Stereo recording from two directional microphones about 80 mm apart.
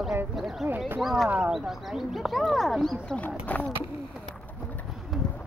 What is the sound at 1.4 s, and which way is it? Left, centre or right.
Wild animals, centre.